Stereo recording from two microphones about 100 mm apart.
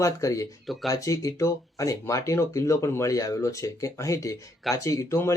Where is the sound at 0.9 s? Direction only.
35° left (ahead or behind).